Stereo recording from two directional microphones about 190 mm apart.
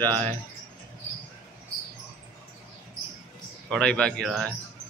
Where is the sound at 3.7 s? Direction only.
5° left (ahead or behind).